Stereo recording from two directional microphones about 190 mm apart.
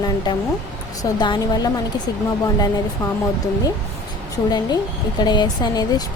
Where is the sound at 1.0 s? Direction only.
20° left (ahead or behind).